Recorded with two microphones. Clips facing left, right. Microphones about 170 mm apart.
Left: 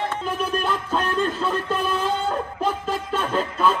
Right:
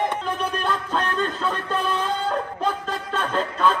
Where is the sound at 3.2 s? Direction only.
10° left (ahead or behind).